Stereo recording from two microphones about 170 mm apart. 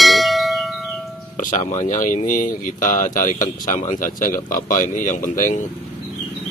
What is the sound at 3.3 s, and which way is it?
Speech, 20° left (ahead or behind).